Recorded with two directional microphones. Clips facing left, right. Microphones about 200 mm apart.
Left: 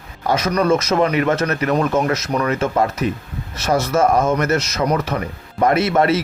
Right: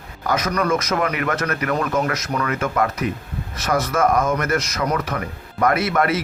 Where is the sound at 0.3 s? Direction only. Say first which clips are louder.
Left 4 dB; 25° left (ahead or behind).